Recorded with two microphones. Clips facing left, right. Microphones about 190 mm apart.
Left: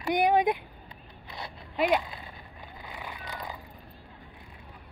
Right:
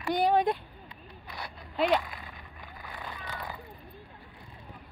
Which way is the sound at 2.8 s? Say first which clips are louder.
Even; 15° left (ahead or behind).